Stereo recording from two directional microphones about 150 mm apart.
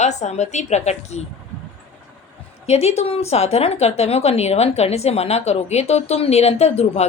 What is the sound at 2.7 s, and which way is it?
Speech, 45° left (ahead or behind).